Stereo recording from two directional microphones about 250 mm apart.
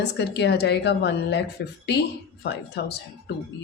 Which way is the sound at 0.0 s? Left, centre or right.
Left.